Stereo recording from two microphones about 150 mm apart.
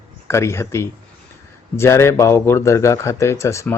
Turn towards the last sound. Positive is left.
turn(degrees=20)  # may be behind; listen again after turning